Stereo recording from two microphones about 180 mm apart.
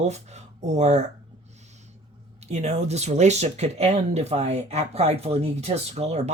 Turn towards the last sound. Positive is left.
turn(degrees=-35)  # may be behind; listen again after turning